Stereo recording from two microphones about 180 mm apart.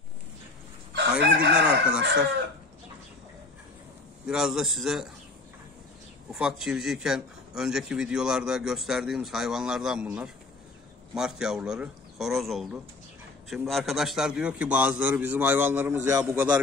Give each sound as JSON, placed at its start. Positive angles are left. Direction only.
{"t": 1.2, "sound": "chicken", "side_deg": -70}
{"t": 4.3, "sound": "a man's voice", "side_deg": -5}
{"t": 6.3, "sound": "a man's voice", "side_deg": -5}